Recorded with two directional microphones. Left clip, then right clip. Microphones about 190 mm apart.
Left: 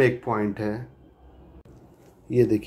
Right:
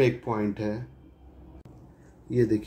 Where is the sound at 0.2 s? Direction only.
15° left (ahead or behind).